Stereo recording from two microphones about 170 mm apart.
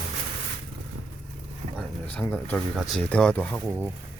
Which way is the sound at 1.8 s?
10° left (ahead or behind).